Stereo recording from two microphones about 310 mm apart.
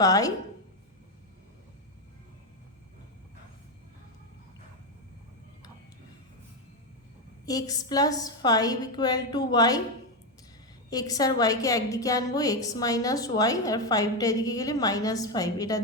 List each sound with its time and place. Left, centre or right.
0.0 s a woman's voice: centre
7.4 s a woman's voice: centre
10.8 s a woman's voice: centre